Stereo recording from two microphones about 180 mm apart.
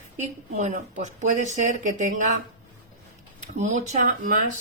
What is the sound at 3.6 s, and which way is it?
Speech, 45° right (ahead or behind).